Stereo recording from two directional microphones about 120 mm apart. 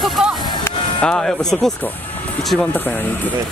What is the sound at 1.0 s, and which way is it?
Speech, 5° left (ahead or behind).